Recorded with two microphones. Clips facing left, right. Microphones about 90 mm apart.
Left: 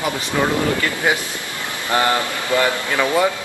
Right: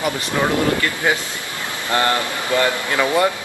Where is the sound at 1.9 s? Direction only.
20° left (ahead or behind).